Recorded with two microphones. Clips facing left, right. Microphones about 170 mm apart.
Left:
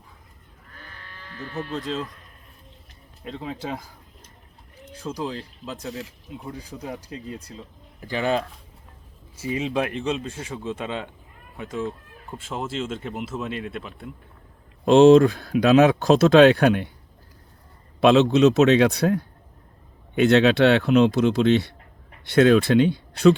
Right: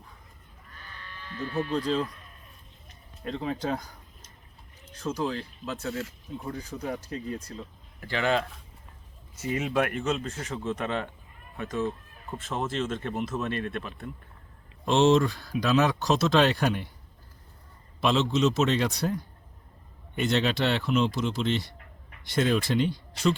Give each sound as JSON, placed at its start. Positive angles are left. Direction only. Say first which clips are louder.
{"t": 1.5, "sound": "speech", "louder": "right 2 dB", "side_deg": 0}
{"t": 3.2, "sound": "speech", "louder": "right 2 dB", "side_deg": 5}
{"t": 4.9, "sound": "speech", "louder": "even", "side_deg": 10}
{"t": 14.9, "sound": "speech", "louder": "left 9 dB", "side_deg": 55}
{"t": 18.0, "sound": "speech", "louder": "left 9 dB", "side_deg": 65}